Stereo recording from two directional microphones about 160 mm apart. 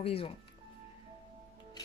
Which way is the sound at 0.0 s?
35° left (ahead or behind).